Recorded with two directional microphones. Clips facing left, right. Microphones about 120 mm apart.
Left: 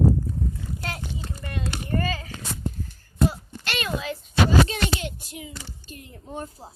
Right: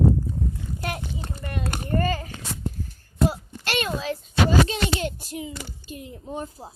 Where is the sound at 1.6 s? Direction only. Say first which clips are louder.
Right 1 dB; 45° right (ahead or behind).